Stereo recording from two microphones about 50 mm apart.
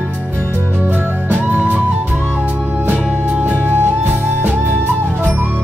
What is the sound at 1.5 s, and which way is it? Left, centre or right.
Music, right.